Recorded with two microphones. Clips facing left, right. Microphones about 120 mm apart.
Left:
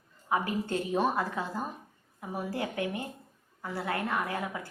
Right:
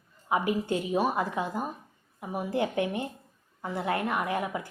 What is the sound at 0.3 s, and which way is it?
A woman's voice, 15° right (ahead or behind).